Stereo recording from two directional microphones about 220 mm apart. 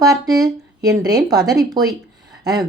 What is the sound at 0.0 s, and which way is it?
A woman's voice, 15° right (ahead or behind).